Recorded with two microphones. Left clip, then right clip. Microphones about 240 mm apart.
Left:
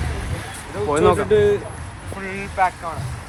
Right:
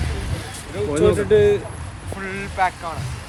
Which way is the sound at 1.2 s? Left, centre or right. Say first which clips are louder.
Right 1 dB; left.